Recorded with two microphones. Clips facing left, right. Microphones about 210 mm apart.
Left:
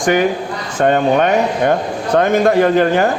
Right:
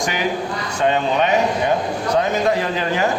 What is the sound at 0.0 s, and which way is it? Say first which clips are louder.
A man's voice: left 7 dB; 50° left (ahead or behind).